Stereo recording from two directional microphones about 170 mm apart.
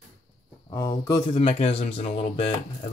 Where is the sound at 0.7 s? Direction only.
20° left (ahead or behind).